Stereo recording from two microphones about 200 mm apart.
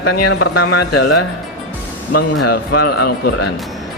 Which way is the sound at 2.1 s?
50° left (ahead or behind).